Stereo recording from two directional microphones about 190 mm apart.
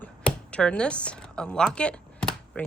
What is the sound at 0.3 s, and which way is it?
Speech, 5° left (ahead or behind).